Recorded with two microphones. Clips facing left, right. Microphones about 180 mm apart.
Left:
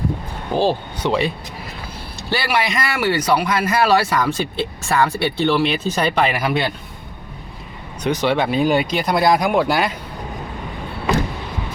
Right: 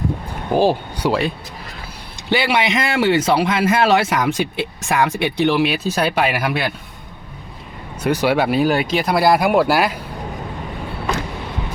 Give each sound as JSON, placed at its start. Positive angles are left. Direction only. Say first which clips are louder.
{"t": 0.5, "sound": "speech", "louder": "right 2 dB", "side_deg": -10}
{"t": 2.3, "sound": "speech", "louder": "right 3 dB", "side_deg": -20}
{"t": 8.0, "sound": "speech", "louder": "right 2 dB", "side_deg": -10}